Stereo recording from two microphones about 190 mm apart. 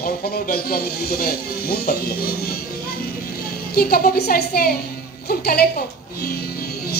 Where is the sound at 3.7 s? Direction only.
55° left (ahead or behind).